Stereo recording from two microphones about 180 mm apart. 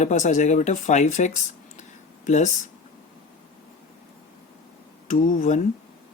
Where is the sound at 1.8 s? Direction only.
40° left (ahead or behind).